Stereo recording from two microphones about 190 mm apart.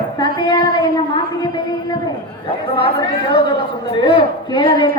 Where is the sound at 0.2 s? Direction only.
20° left (ahead or behind).